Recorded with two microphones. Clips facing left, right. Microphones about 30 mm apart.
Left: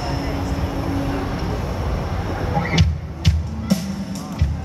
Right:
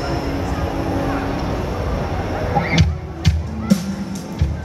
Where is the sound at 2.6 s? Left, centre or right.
Right.